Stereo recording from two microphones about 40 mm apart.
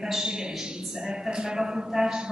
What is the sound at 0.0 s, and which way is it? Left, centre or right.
A woman's voice, centre.